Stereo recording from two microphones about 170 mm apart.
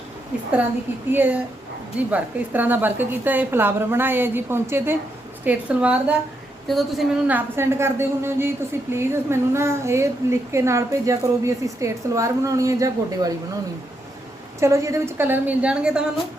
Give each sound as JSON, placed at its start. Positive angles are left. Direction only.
{"t": 1.1, "sound": "a woman's voice", "side_deg": -10}
{"t": 7.3, "sound": "a woman's voice", "side_deg": -10}
{"t": 14.6, "sound": "a woman's voice", "side_deg": -15}